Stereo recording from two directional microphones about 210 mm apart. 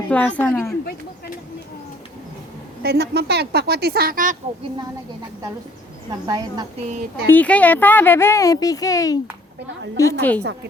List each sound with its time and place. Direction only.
0.1 s speech: 5° left (ahead or behind)
2.8 s a woman's voice: 50° right (ahead or behind)
6.2 s a woman's voice: 20° right (ahead or behind)
7.3 s speech: 5° left (ahead or behind)